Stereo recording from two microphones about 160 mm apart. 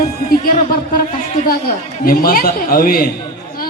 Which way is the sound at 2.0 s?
65° left (ahead or behind).